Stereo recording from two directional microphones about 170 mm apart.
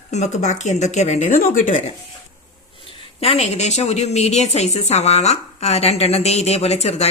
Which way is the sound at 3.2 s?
35° left (ahead or behind).